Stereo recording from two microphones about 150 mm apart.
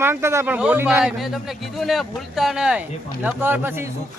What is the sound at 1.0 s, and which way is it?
Speech, centre (ahead or behind).